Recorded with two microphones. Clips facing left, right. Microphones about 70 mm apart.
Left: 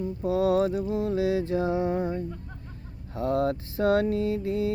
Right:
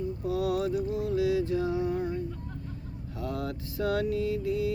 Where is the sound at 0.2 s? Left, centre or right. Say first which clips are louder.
Left 7 dB; left.